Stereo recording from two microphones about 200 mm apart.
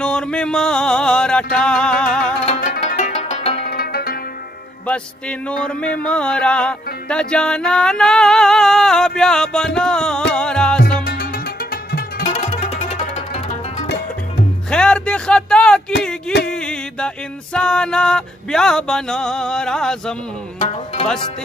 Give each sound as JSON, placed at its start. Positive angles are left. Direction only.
{"t": 0.0, "sound": "music", "side_deg": 5}
{"t": 2.4, "sound": "music", "side_deg": 35}
{"t": 3.6, "sound": "zither", "side_deg": 50}
{"t": 5.5, "sound": "music", "side_deg": 5}
{"t": 11.1, "sound": "music", "side_deg": 50}
{"t": 12.4, "sound": "music", "side_deg": 35}
{"t": 14.7, "sound": "a sound", "side_deg": 5}
{"t": 20.6, "sound": "music", "side_deg": 30}